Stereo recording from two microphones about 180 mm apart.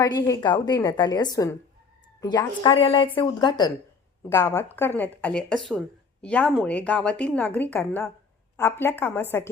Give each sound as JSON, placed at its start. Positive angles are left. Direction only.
{"t": 0.0, "sound": "a woman's voice", "side_deg": 20}
{"t": 4.3, "sound": "a woman's voice", "side_deg": 15}